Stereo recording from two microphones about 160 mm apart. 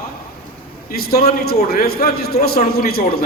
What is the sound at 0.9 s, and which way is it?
A man's voice, 70° left (ahead or behind).